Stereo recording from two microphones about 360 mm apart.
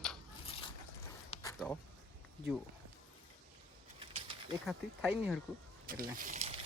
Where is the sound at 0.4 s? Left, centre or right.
Centre.